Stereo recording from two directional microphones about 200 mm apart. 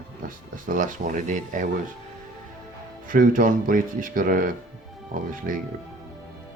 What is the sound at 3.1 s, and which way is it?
Speech, 45° right (ahead or behind).